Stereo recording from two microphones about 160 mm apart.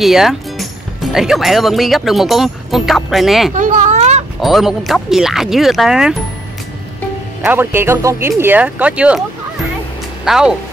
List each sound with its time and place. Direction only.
0.0 s speech: centre (ahead or behind)
3.5 s a sound: 50° right (ahead or behind)
4.4 s speech: centre (ahead or behind)
7.4 s speech: 15° right (ahead or behind)
10.2 s speech: 5° right (ahead or behind)